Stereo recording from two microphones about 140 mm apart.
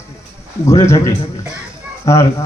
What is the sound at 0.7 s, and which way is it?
A man's voice, 20° left (ahead or behind).